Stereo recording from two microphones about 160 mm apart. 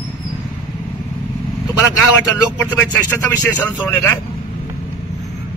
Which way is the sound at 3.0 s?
15° left (ahead or behind).